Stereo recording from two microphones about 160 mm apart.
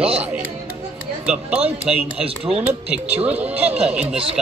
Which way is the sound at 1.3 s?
5° right (ahead or behind).